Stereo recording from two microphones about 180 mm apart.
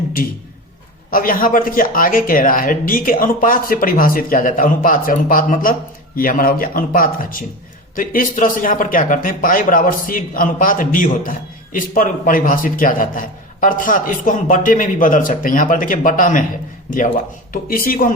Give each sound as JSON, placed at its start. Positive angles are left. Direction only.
{"t": 1.1, "sound": "speech", "side_deg": 50}
{"t": 17.5, "sound": "speech", "side_deg": 50}